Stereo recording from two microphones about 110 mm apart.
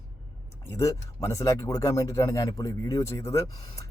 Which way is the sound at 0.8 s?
30° left (ahead or behind).